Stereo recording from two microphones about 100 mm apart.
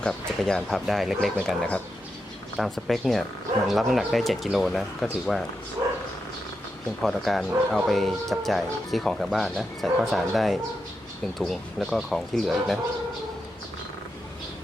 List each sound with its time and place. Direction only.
0.0 s speech: 5° left (ahead or behind)
5.8 s dog: 35° right (ahead or behind)
7.0 s speech: centre (ahead or behind)